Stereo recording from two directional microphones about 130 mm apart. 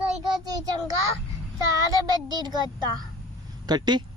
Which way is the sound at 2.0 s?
30° right (ahead or behind).